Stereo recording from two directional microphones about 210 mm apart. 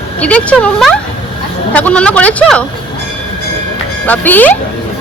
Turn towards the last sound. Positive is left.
turn(degrees=10)  # may be behind; listen again after turning